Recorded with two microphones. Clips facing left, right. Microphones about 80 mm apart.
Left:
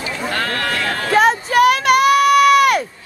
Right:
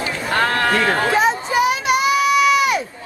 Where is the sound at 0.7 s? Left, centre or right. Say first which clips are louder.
Right 4 dB; right.